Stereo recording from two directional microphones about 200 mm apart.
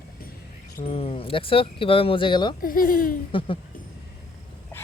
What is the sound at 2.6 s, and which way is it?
Speech, 45° left (ahead or behind).